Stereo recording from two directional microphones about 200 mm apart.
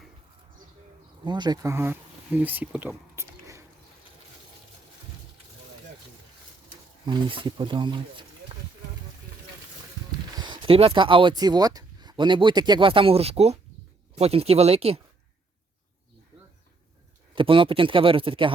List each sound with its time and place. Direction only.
1.2 s speech: 20° right (ahead or behind)
7.0 s speech: 25° right (ahead or behind)
10.3 s speech: 25° right (ahead or behind)
17.3 s speech: 25° right (ahead or behind)